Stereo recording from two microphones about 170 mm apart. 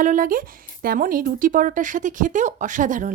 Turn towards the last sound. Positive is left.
turn(degrees=-50)  # may be behind; listen again after turning